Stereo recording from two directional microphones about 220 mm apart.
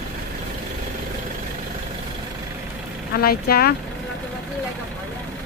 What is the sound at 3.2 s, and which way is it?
Speech, 45° left (ahead or behind).